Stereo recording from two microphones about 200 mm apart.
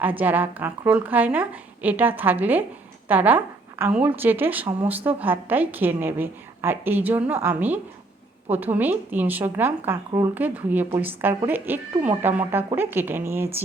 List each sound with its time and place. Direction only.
0.0 s a woman's voice: 10° right (ahead or behind)